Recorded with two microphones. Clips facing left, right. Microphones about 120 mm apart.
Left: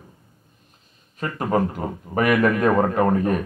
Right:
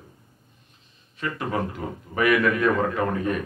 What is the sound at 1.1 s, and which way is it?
A man's voice, 45° left (ahead or behind).